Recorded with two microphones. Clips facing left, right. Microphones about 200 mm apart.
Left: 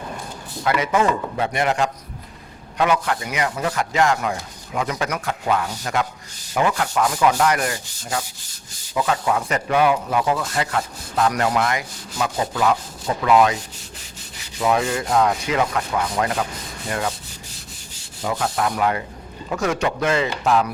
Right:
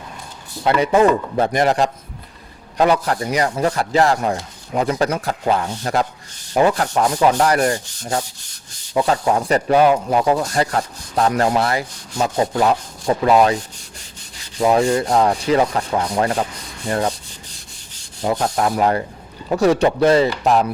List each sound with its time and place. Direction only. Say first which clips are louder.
0.6 s speech: right 5 dB; 30° right (ahead or behind)
14.6 s speech: right 5 dB; 30° right (ahead or behind)
16.9 s rub: right 5 dB; 35° right (ahead or behind)
18.2 s speech: right 4 dB; 35° right (ahead or behind)